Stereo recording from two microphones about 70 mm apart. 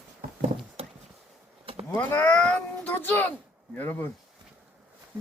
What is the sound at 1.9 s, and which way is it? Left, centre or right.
Speech, left.